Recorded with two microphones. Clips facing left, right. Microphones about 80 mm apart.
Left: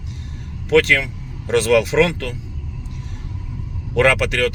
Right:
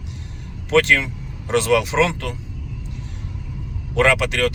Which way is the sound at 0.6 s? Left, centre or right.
Right.